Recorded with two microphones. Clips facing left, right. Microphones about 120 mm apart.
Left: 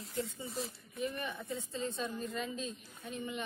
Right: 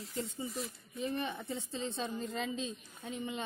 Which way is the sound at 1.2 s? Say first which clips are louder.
Right 2 dB; 25° right (ahead or behind).